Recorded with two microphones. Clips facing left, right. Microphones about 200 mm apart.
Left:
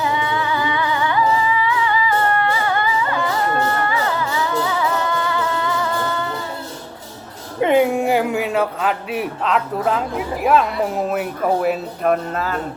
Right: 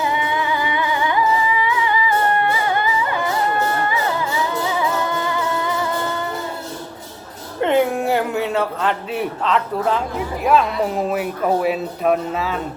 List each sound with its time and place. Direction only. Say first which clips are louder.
0.0 s music: even; 15° right (ahead or behind)
4.8 s music: even; 15° right (ahead or behind)
7.6 s a man's voice: left 2 dB; 10° left (ahead or behind)